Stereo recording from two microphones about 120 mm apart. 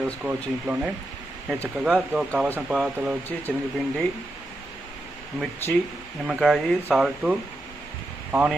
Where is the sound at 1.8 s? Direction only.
5° right (ahead or behind).